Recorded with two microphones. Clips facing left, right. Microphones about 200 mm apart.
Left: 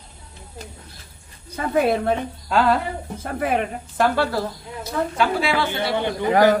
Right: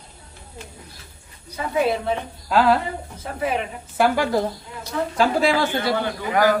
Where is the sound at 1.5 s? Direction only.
50° left (ahead or behind).